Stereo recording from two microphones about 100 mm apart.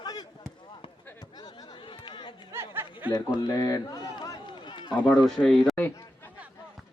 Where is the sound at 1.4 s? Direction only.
40° left (ahead or behind).